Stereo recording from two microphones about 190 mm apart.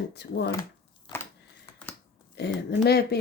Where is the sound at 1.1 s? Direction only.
10° left (ahead or behind).